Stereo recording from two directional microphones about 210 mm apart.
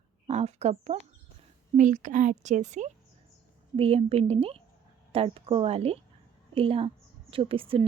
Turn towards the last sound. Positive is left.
turn(degrees=-25)  # may be behind; listen again after turning